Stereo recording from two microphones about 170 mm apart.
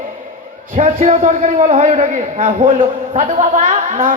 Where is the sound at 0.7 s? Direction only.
45° right (ahead or behind).